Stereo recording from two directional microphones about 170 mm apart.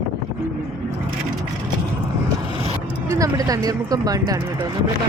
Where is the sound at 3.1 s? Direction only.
20° right (ahead or behind).